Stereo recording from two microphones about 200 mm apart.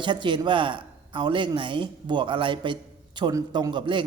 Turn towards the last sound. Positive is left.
turn(degrees=-25)  # may be behind; listen again after turning